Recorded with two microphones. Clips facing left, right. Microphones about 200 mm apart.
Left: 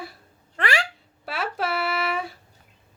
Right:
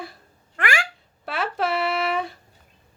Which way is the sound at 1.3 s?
5° left (ahead or behind).